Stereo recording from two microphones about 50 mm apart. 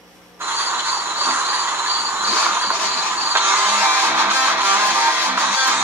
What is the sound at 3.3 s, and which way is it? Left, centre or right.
Music, right.